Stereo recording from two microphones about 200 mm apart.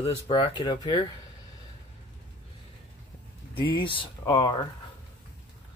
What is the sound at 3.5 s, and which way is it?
Speech, 25° left (ahead or behind).